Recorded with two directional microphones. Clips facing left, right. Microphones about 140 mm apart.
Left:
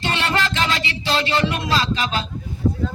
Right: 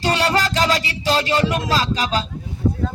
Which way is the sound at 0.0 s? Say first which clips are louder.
Right 3 dB; 40° right (ahead or behind).